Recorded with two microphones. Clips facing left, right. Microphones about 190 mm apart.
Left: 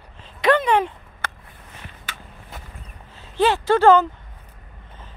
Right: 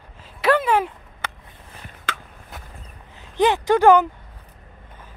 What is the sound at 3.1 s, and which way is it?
Speech, 15° right (ahead or behind).